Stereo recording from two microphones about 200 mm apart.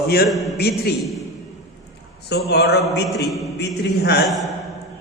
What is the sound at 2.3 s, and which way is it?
Speech, 55° left (ahead or behind).